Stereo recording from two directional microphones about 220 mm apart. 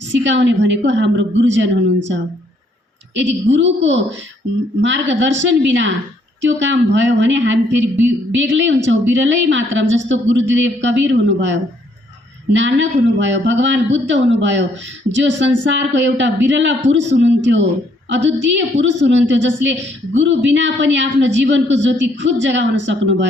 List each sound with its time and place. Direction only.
0.0 s a woman's voice: 55° right (ahead or behind)
12.5 s a woman's voice: 55° right (ahead or behind)